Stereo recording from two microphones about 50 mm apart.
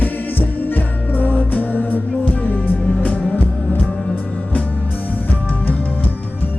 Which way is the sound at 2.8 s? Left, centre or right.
Left.